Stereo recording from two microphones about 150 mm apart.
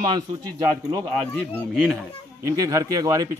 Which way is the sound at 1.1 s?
5° left (ahead or behind).